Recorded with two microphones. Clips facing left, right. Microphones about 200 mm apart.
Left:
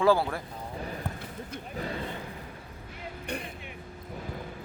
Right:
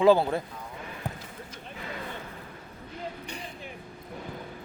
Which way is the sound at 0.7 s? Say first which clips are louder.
Left 4 dB; 35° left (ahead or behind).